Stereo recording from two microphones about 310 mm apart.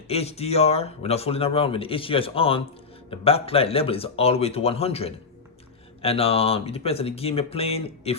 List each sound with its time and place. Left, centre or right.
0.1 s a man's voice: centre